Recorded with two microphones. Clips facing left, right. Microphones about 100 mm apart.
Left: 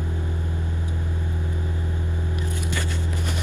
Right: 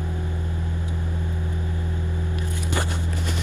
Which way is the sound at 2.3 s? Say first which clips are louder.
Left 1 dB; 20° left (ahead or behind).